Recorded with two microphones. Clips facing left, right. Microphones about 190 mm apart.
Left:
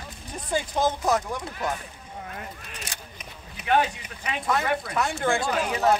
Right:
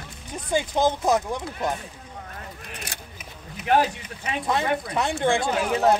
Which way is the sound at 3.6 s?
40° right (ahead or behind).